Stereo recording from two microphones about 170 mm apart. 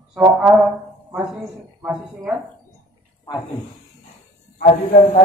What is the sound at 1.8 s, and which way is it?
Speech, 5° right (ahead or behind).